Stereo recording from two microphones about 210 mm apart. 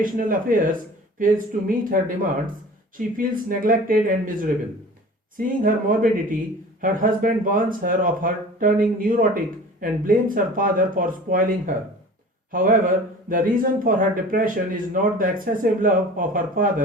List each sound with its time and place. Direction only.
0.0 s speech: 40° right (ahead or behind)